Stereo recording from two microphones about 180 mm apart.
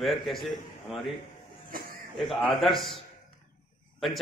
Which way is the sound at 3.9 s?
Centre (ahead or behind).